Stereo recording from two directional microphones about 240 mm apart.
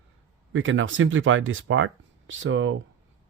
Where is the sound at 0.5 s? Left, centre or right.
Right.